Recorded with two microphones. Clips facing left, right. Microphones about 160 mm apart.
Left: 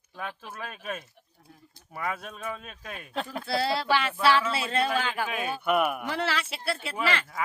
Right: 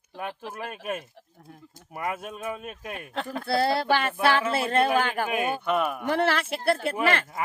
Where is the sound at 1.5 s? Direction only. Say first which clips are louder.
Right 4 dB; 50° right (ahead or behind).